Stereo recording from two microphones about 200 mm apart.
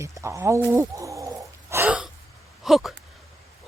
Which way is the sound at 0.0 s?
15° right (ahead or behind).